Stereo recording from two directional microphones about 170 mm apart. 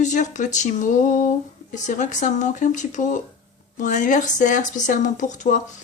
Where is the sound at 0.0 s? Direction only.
45° left (ahead or behind).